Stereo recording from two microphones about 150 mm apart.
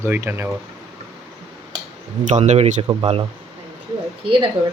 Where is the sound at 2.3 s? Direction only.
50° right (ahead or behind).